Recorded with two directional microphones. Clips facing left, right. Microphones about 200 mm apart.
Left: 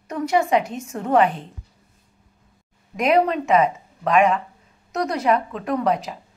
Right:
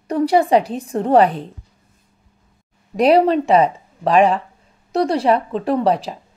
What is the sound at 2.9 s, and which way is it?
Speech, 35° right (ahead or behind).